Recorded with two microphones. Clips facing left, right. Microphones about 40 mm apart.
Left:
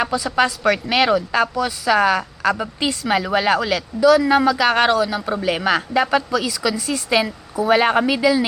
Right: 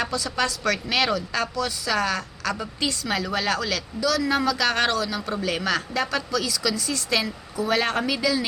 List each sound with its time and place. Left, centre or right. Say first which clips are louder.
0.0 s a woman's voice: left 7 dB; centre